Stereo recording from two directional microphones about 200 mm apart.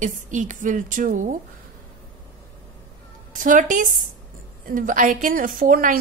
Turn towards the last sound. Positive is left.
turn(degrees=-45)  # may be behind; listen again after turning